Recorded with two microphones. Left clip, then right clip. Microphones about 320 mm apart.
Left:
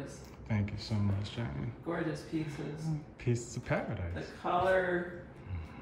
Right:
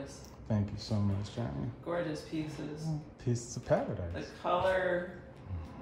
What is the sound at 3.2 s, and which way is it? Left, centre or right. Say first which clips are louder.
Speech: left 2 dB; right.